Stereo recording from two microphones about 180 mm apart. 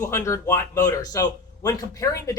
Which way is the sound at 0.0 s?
15° left (ahead or behind).